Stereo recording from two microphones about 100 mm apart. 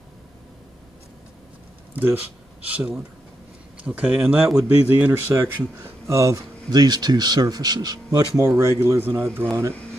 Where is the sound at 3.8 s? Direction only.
15° right (ahead or behind); by 9.7 s 30° right (ahead or behind).